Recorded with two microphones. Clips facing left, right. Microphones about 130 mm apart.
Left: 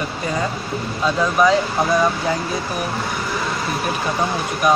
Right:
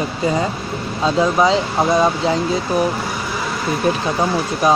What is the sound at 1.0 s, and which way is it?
Speech, 25° right (ahead or behind).